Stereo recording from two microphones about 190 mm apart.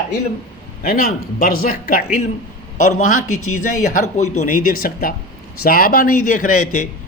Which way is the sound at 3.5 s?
45° left (ahead or behind).